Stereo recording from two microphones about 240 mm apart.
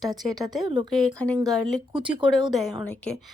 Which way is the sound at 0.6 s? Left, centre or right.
Centre.